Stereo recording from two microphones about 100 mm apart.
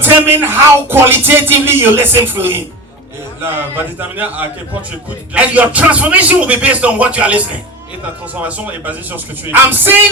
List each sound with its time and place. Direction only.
0.0 s a man's voice: 20° right (ahead or behind)